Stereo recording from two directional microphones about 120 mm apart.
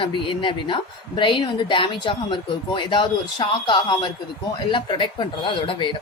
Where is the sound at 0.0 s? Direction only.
45° left (ahead or behind).